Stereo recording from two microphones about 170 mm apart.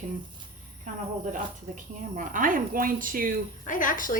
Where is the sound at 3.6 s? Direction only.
50° left (ahead or behind).